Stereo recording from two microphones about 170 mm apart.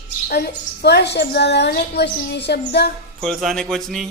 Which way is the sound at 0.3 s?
70° left (ahead or behind).